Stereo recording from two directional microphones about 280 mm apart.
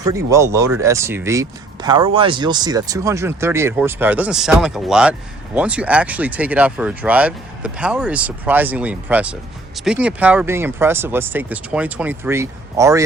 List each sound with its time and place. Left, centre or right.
0.0 s speech: centre